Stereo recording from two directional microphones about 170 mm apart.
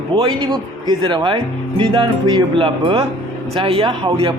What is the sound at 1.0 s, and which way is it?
Speech, 30° right (ahead or behind).